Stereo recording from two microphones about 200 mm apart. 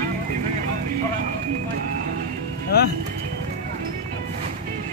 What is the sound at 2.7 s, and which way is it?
Music, 50° left (ahead or behind).